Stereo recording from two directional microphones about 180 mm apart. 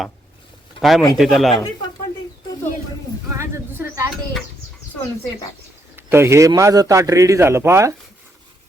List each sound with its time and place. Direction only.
0.8 s speech: centre (ahead or behind)
3.3 s speech: 15° right (ahead or behind)
6.0 s a man's voice: 15° right (ahead or behind)